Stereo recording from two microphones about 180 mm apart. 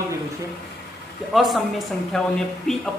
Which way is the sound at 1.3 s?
Centre (ahead or behind).